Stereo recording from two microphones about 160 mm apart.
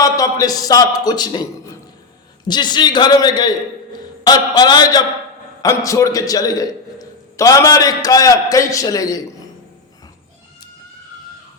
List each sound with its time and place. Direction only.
0.0 s a man's voice: 20° left (ahead or behind)
2.5 s a man's voice: 25° left (ahead or behind)